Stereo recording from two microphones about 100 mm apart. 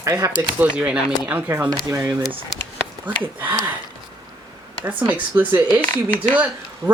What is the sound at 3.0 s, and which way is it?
Speech, 20° right (ahead or behind).